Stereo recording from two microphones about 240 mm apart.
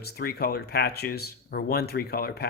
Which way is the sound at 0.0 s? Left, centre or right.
Left.